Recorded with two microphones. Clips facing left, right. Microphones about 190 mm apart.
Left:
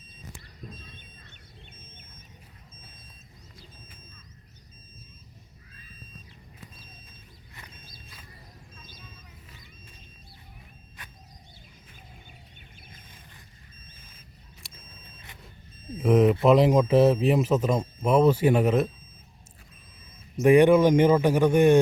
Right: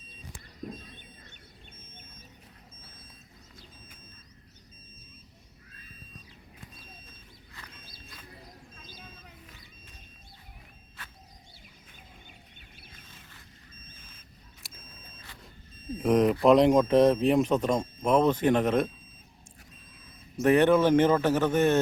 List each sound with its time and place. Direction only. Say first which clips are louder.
14.6 s vehicle: left 1 dB; centre (ahead or behind)
16.0 s speech: left 3 dB; centre (ahead or behind)
20.4 s speech: left 4 dB; 10° left (ahead or behind)